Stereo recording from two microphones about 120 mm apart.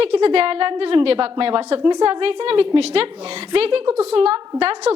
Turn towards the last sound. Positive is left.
turn(degrees=-50)  # may be behind; listen again after turning